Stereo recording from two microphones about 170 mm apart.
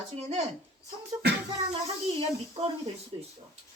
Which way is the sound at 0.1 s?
40° right (ahead or behind).